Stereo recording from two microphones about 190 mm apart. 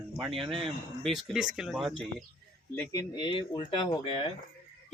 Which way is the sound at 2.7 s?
20° left (ahead or behind).